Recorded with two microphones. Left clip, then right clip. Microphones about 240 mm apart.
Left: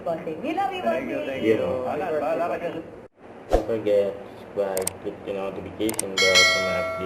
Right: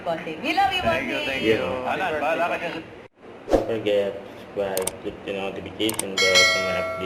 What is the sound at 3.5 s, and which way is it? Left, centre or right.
Speech, centre.